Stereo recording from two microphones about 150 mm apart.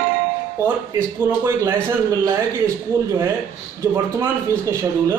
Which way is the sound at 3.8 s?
20° right (ahead or behind).